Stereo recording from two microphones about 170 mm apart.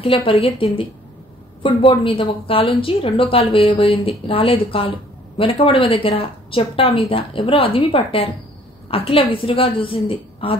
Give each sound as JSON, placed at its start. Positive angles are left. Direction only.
{"t": 0.0, "sound": "a woman's voice", "side_deg": 30}